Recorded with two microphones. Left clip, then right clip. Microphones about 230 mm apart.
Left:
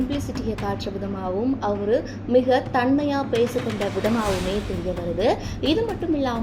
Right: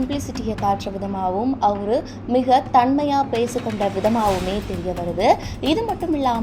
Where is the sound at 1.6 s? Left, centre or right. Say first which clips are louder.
Right 4 dB; right.